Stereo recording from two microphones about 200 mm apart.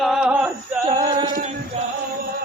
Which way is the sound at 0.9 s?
20° right (ahead or behind).